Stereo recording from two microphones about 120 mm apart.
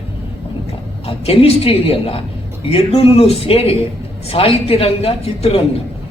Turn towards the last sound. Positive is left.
turn(degrees=55)  # may be behind; listen again after turning